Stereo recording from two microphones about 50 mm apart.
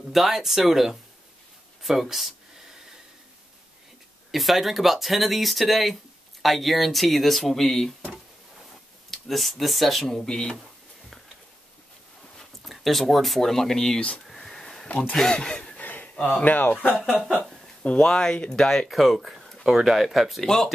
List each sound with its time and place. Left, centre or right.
0.1 s speech: centre
4.3 s speech: centre
9.1 s speech: centre
12.4 s speech: centre
13.9 s speech: left
14.2 s a sound: centre
14.9 s speech: left
15.8 s a sound: left
16.3 s speech: left
17.4 s speech: left
18.9 s speech: centre
20.4 s speech: centre